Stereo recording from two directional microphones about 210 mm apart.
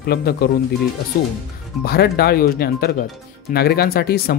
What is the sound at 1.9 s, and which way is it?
Speech, 50° left (ahead or behind).